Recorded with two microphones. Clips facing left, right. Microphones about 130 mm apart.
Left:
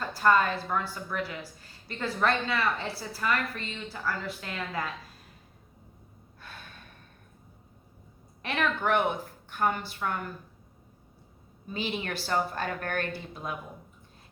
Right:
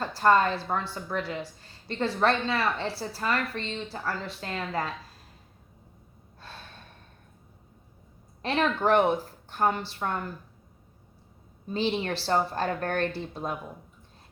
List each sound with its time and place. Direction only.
0.0 s a woman's voice: 30° right (ahead or behind)
6.4 s gasp: 30° right (ahead or behind)
8.4 s a woman's voice: 30° right (ahead or behind)
11.7 s a woman's voice: 30° right (ahead or behind)